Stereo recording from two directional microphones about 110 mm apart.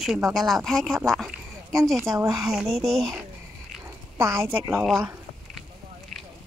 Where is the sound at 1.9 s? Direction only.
25° right (ahead or behind).